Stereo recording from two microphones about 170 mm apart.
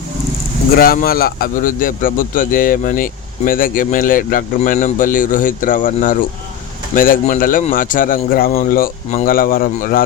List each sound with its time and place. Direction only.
0.7 s a man's voice: 60° left (ahead or behind)